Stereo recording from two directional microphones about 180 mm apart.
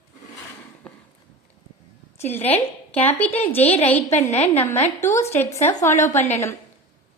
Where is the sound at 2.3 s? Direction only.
10° left (ahead or behind).